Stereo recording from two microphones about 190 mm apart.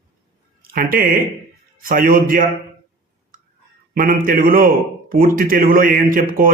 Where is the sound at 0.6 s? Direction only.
50° right (ahead or behind).